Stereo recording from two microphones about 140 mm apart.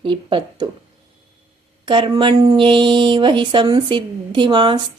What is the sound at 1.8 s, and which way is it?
Speech, 35° right (ahead or behind).